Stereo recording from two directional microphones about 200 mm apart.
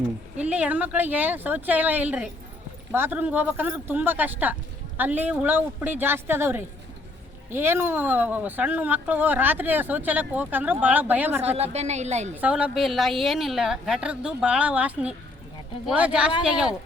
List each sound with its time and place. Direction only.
0.3 s speech: 5° right (ahead or behind)
11.5 s a woman's voice: 30° right (ahead or behind)
12.4 s a woman's voice: 5° right (ahead or behind)